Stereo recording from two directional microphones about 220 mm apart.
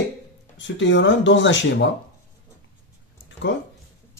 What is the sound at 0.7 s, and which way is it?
Speech, 55° left (ahead or behind).